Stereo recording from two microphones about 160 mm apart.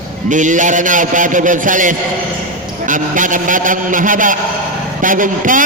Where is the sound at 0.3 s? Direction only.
50° right (ahead or behind).